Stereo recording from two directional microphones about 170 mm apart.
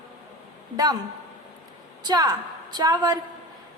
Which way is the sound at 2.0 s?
20° right (ahead or behind).